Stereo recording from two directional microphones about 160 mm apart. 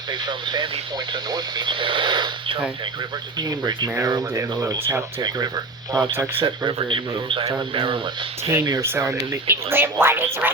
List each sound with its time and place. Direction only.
0.1 s speech: 30° right (ahead or behind)
8.4 s speech: 20° right (ahead or behind)